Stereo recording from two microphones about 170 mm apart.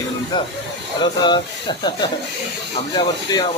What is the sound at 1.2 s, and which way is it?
Speech, 25° left (ahead or behind).